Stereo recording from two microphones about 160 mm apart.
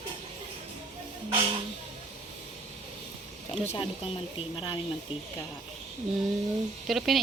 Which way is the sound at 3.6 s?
35° left (ahead or behind).